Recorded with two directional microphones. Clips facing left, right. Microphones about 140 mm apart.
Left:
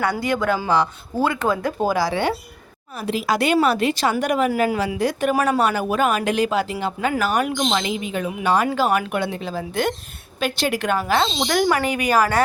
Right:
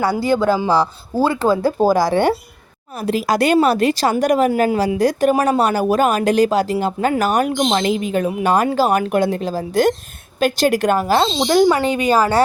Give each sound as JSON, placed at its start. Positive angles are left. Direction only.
{"t": 0.0, "sound": "speech", "side_deg": -30}
{"t": 7.5, "sound": "speech", "side_deg": -30}
{"t": 7.8, "sound": "a woman's voice", "side_deg": -45}
{"t": 11.2, "sound": "speech", "side_deg": -25}